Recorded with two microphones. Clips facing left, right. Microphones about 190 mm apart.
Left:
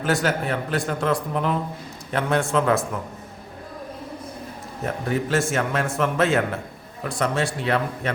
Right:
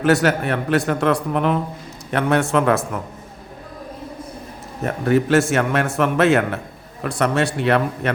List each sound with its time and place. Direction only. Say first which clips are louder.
0.0 s a man's voice: right 6 dB; 70° right (ahead or behind)
5.0 s a man's voice: right 8 dB; 70° right (ahead or behind)